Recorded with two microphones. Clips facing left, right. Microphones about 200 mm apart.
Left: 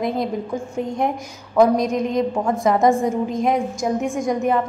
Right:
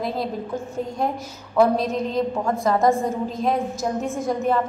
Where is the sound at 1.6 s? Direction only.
15° left (ahead or behind).